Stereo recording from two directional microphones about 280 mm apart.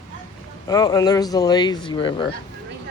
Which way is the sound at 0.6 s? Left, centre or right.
Centre.